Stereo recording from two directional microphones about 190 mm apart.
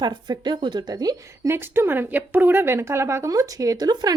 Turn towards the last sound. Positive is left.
turn(degrees=-20)  # may be behind; listen again after turning